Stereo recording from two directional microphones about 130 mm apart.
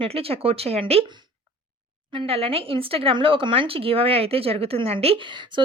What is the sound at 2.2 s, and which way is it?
Speech, 50° right (ahead or behind).